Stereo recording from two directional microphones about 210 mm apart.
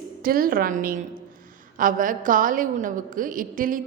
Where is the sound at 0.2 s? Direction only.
45° right (ahead or behind).